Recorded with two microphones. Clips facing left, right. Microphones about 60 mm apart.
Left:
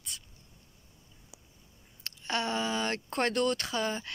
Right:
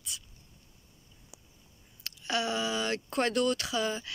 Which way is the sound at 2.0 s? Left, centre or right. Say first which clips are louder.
Right 1 dB; left.